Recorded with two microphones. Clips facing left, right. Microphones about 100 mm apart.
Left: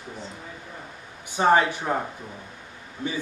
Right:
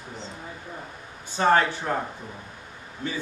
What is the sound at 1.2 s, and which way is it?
Speech, 15° left (ahead or behind).